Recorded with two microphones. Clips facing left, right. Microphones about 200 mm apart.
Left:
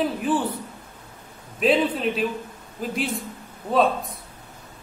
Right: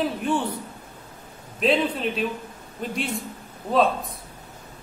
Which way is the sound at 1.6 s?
Centre (ahead or behind).